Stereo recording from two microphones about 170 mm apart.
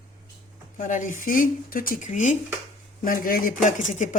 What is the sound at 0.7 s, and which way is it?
Speech, 50° left (ahead or behind).